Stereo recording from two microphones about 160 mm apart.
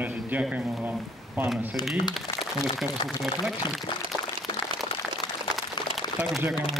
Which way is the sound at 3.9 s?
30° left (ahead or behind).